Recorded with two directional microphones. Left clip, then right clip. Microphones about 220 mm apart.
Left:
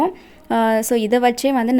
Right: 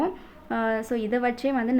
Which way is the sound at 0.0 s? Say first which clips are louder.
Left 8 dB; 45° left (ahead or behind).